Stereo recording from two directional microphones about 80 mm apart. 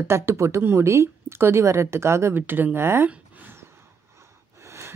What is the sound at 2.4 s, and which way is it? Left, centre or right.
Speech, right.